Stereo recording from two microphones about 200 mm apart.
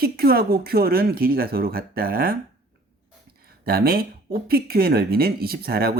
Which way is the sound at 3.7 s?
50° right (ahead or behind).